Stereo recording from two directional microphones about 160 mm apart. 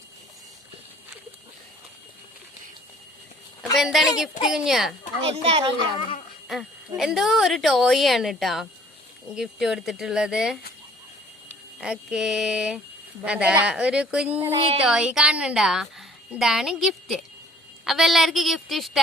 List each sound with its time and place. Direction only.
3.8 s a woman's voice: centre (ahead or behind)
5.3 s a child's voice: 40° right (ahead or behind)
6.5 s a woman's voice: centre (ahead or behind)
11.8 s a woman's voice: 5° right (ahead or behind)
14.5 s a child's voice: 35° right (ahead or behind)
14.8 s a woman's voice: 5° right (ahead or behind)